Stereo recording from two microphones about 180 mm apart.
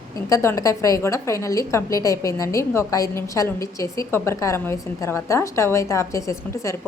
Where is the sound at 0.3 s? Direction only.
20° left (ahead or behind).